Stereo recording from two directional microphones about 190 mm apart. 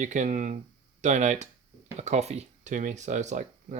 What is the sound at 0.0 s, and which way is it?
Speech, 40° right (ahead or behind).